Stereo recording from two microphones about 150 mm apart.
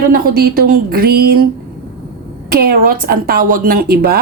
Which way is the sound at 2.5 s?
80° right.